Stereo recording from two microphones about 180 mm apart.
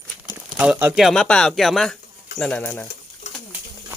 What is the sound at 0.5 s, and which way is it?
Speech, 5° right (ahead or behind).